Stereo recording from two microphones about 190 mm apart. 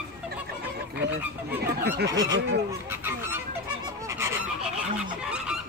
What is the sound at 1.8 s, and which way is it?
Goose, 60° right (ahead or behind).